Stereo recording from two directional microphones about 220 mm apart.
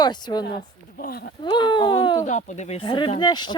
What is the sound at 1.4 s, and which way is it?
Speech, 20° left (ahead or behind).